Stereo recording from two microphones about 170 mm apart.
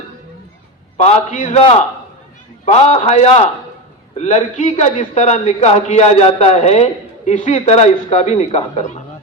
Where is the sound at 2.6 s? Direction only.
40° left (ahead or behind).